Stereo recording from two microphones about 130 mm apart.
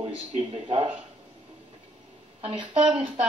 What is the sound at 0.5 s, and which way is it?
Speech, 50° right (ahead or behind).